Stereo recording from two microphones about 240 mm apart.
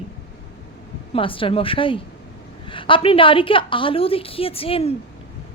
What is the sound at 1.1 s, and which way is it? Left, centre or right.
A woman's voice, left.